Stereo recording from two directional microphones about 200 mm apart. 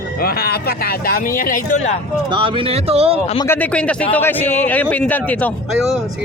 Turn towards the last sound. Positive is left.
turn(degrees=5)  # may be behind; listen again after turning